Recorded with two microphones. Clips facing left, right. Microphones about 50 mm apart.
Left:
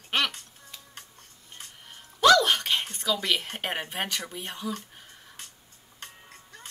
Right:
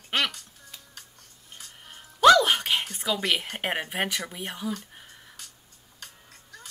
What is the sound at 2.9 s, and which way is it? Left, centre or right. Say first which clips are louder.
Whispering: even; right.